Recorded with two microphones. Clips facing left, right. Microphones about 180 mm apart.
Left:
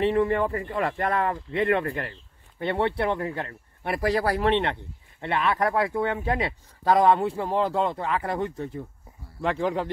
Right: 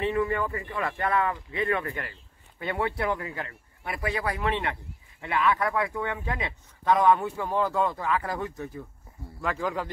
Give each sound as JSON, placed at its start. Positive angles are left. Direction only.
{"t": 0.1, "sound": "a man's voice", "side_deg": 35}